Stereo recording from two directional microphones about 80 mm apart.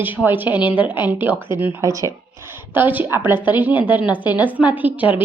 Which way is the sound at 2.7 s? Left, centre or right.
Right.